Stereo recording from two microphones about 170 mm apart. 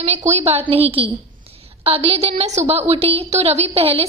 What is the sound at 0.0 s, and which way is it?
A woman's voice, 40° right (ahead or behind).